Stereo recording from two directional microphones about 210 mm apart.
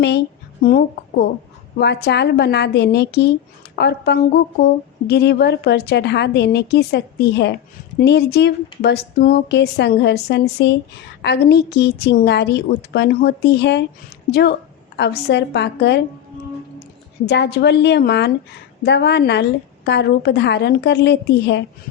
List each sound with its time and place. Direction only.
0.6 s a woman's voice: 45° left (ahead or behind)
17.2 s a woman's voice: 55° left (ahead or behind)